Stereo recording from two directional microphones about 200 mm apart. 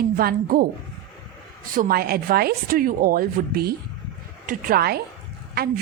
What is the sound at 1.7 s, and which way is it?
A woman's voice, 50° right (ahead or behind).